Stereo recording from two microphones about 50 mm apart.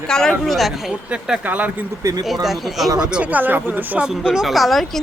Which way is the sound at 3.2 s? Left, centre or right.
Right.